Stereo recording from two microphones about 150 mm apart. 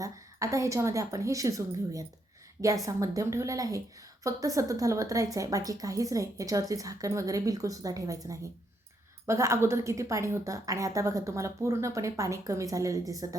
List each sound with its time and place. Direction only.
0.0 s a woman's voice: 20° right (ahead or behind)